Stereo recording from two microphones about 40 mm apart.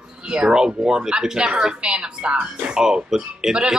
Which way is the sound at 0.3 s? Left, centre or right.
Centre.